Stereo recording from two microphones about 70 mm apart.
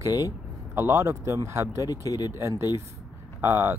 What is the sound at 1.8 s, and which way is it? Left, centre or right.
Speech, left.